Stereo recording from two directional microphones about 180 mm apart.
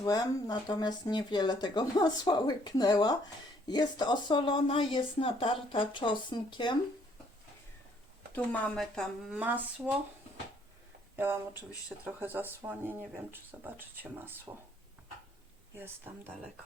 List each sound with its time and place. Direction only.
0.0 s speech: 20° left (ahead or behind)
8.3 s speech: 10° left (ahead or behind); by 9.9 s 10° right (ahead or behind)
11.2 s speech: 10° right (ahead or behind)
15.7 s speech: 10° right (ahead or behind)